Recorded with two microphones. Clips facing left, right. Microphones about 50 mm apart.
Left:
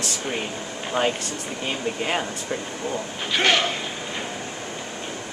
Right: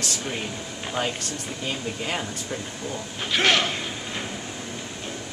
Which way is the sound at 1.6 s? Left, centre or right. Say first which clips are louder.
Left 4 dB; left.